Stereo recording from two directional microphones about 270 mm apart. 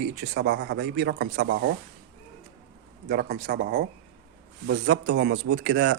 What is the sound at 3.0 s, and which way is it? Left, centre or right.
Speech, right.